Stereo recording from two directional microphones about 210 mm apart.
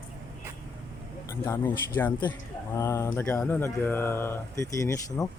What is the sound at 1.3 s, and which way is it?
Speech, 10° left (ahead or behind).